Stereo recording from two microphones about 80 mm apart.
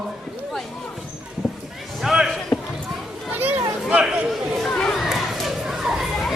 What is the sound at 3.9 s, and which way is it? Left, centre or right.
Speech, centre.